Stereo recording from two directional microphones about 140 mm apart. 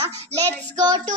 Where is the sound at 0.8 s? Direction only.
30° right (ahead or behind).